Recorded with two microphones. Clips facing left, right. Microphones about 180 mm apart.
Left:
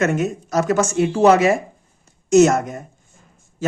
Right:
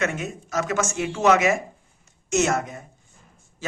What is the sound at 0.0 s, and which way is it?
Speech, 40° left (ahead or behind).